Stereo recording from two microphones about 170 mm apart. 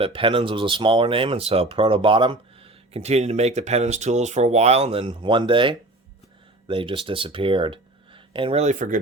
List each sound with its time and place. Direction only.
0.0 s speech: 30° right (ahead or behind); by 9.0 s 45° right (ahead or behind)